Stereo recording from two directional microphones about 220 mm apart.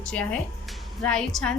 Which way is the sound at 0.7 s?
5° left (ahead or behind).